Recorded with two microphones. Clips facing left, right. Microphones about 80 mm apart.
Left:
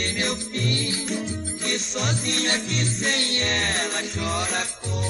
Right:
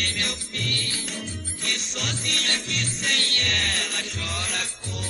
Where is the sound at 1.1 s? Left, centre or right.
Centre.